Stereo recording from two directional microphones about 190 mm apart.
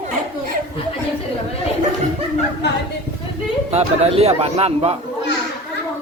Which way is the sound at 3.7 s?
35° right (ahead or behind).